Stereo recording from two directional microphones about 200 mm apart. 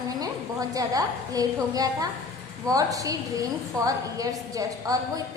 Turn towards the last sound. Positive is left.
turn(degrees=-15)  # may be behind; listen again after turning